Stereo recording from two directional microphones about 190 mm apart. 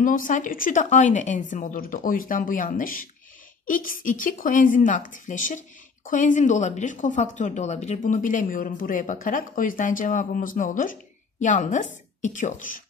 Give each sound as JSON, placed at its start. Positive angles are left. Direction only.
{"t": 0.0, "sound": "speech", "side_deg": 45}